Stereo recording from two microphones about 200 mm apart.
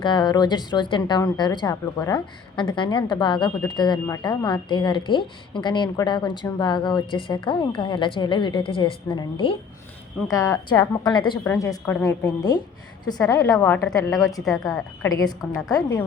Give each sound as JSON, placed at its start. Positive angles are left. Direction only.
{"t": 0.0, "sound": "a woman's voice", "side_deg": 20}
{"t": 13.7, "sound": "a woman's voice", "side_deg": 5}
{"t": 13.9, "sound": "a woman's voice", "side_deg": 15}